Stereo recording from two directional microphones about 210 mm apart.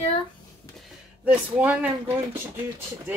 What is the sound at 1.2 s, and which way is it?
Speech, 5° right (ahead or behind).